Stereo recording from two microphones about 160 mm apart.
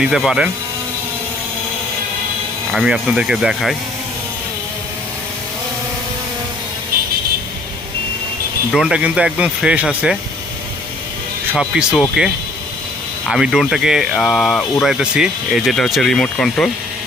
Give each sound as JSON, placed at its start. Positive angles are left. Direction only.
{"t": 0.0, "sound": "speech", "side_deg": -5}
{"t": 2.7, "sound": "speech", "side_deg": -5}
{"t": 8.7, "sound": "speech", "side_deg": -5}
{"t": 11.5, "sound": "speech", "side_deg": -5}